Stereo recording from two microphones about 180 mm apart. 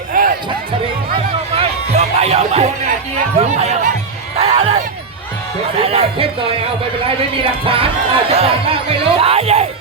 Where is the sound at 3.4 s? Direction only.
35° right (ahead or behind).